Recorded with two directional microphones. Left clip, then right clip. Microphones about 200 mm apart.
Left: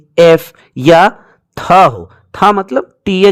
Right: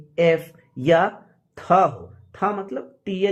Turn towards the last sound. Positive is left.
turn(degrees=55)  # may be behind; listen again after turning